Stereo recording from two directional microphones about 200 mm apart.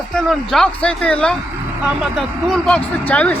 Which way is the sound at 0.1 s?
Centre (ahead or behind).